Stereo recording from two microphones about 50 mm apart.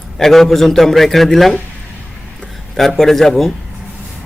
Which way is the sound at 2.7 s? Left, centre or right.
Centre.